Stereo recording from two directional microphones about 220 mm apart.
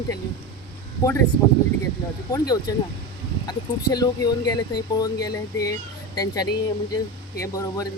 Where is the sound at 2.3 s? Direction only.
15° left (ahead or behind).